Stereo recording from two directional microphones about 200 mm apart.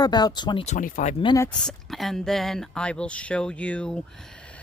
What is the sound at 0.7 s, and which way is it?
Speech, 40° left (ahead or behind).